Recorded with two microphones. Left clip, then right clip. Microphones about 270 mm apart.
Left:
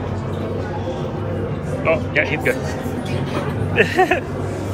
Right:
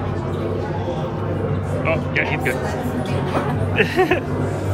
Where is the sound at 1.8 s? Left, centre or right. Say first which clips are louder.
Left 3 dB; centre.